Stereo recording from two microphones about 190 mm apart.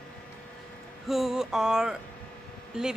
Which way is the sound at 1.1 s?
Centre (ahead or behind).